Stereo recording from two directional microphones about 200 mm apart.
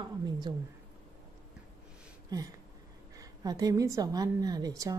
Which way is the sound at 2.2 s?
20° right (ahead or behind).